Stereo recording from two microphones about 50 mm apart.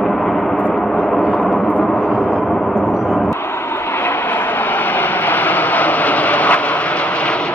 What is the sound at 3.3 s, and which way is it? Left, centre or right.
Vehicle, left.